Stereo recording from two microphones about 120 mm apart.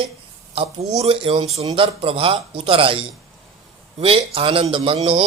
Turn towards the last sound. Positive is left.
turn(degrees=-50)  # may be behind; listen again after turning